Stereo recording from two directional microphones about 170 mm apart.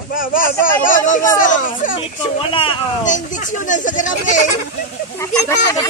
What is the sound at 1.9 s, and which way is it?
Speech, 30° left (ahead or behind).